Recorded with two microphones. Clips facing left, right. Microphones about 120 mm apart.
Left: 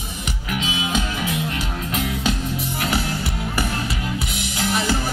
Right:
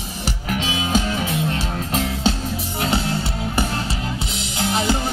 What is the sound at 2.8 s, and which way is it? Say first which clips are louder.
Music: right 4 dB; 25° right (ahead or behind).